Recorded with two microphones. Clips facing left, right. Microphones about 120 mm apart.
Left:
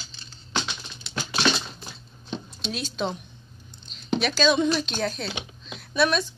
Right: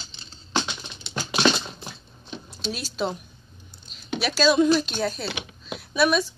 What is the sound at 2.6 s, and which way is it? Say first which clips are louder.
Speech: right 2 dB; 5° right (ahead or behind).